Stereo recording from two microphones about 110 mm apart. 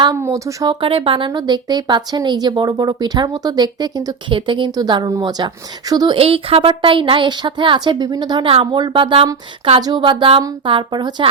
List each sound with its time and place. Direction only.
0.1 s speech: 25° right (ahead or behind)
0.8 s speech: 55° right (ahead or behind)
4.4 s speech: 50° right (ahead or behind)
6.1 s speech: 60° right (ahead or behind); by 8.4 s 40° right (ahead or behind)
8.4 s speech: 50° right (ahead or behind)
9.8 s speech: 45° right (ahead or behind)